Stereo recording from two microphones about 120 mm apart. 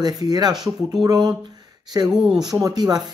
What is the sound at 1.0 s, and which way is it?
Speech, 35° right (ahead or behind).